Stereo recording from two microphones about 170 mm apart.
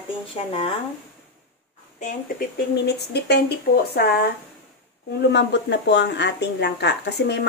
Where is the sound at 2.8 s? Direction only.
75° left (ahead or behind).